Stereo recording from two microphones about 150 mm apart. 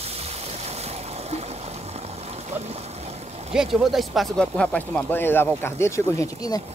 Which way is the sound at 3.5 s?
5° right (ahead or behind).